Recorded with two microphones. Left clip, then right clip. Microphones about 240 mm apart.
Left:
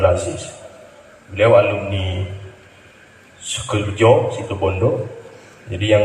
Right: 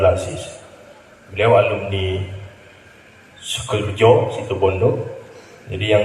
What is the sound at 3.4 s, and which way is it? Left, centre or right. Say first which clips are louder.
Speech: even; right.